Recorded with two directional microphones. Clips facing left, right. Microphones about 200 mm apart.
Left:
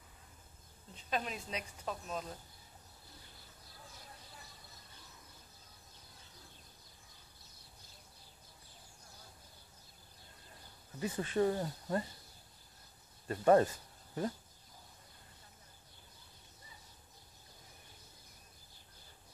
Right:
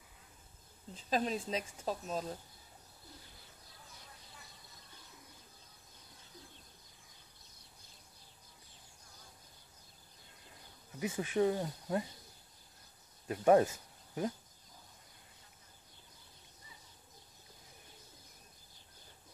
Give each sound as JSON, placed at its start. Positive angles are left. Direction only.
{"t": 0.9, "sound": "a woman's voice", "side_deg": -35}
{"t": 11.0, "sound": "speech", "side_deg": -10}
{"t": 13.3, "sound": "speech", "side_deg": -10}